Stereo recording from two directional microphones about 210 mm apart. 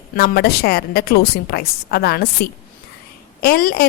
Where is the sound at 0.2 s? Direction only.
45° left (ahead or behind).